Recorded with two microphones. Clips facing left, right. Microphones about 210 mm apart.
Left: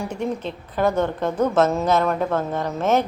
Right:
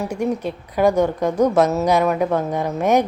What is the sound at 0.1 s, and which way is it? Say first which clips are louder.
A woman's voice: right 4 dB; 10° right (ahead or behind).